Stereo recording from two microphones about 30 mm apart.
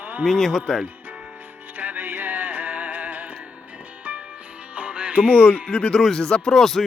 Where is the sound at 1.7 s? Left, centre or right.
Right.